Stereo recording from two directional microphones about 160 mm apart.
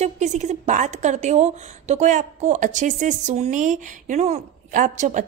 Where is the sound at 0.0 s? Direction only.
45° right (ahead or behind).